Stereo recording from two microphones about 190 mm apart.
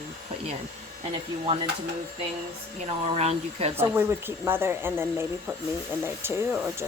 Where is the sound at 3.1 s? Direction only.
35° right (ahead or behind).